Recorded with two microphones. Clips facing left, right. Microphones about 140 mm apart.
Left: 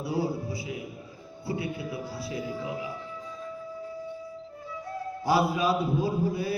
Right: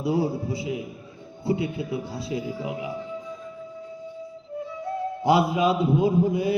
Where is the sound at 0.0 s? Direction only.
25° right (ahead or behind).